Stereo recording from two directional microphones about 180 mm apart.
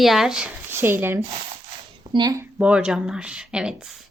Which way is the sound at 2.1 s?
25° right (ahead or behind).